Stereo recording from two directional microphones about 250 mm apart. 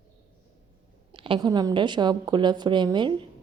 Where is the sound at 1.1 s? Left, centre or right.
Right.